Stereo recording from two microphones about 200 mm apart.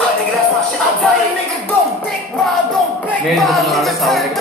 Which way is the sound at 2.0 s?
Centre (ahead or behind).